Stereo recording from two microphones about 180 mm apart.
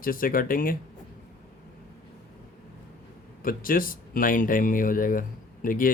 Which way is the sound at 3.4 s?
50° left (ahead or behind).